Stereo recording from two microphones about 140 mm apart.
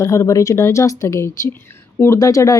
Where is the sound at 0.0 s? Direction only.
20° left (ahead or behind).